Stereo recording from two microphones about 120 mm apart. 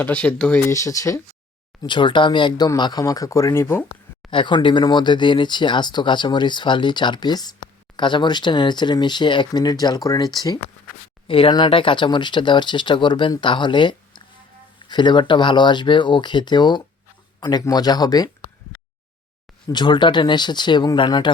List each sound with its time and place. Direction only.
0.0 s speech: 10° left (ahead or behind)
0.6 s speech: 25° left (ahead or behind)
1.8 s speech: 40° left (ahead or behind); by 3.8 s 20° left (ahead or behind)
4.3 s speech: 45° left (ahead or behind)
11.3 s speech: 45° left (ahead or behind)
19.6 s speech: 40° left (ahead or behind)